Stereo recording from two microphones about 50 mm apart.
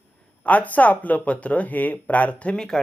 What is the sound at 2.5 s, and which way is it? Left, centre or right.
Speech, centre.